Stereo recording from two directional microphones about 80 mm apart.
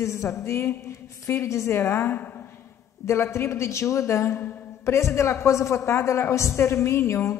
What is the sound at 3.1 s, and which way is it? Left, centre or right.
A woman's voice, left.